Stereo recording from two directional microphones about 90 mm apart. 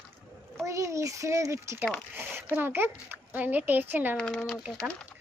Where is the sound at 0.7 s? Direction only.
35° right (ahead or behind).